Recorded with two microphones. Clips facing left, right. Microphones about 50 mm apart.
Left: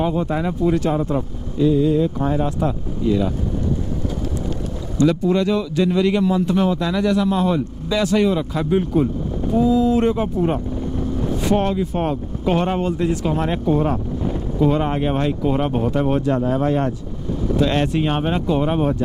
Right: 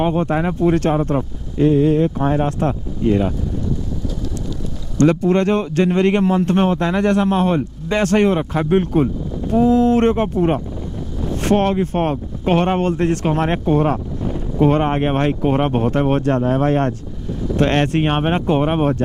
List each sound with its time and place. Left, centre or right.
0.0 s speech: right
0.6 s speech: right
4.9 s speech: right
11.4 s speech: right